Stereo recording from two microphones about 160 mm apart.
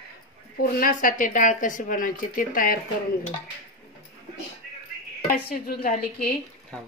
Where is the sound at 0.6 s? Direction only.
60° left (ahead or behind).